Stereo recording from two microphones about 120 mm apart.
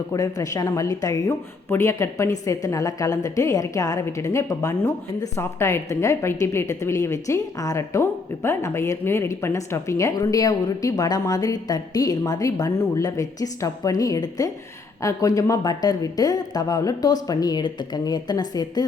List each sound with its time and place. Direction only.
0.1 s a woman's voice: 30° left (ahead or behind)